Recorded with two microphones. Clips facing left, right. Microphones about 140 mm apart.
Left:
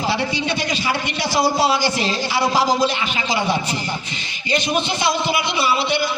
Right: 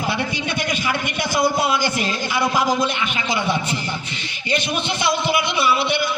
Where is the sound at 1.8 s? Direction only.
50° right (ahead or behind).